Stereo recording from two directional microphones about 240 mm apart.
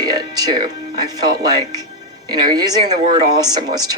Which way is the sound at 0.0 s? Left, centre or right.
Centre.